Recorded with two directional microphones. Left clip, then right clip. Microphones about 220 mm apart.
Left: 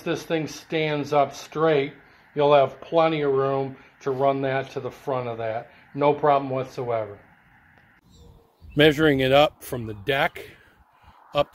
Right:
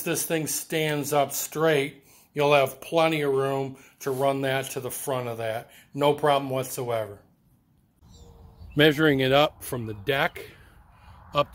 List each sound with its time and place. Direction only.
0.0 s speech: 20° right (ahead or behind)
8.7 s speech: 5° left (ahead or behind)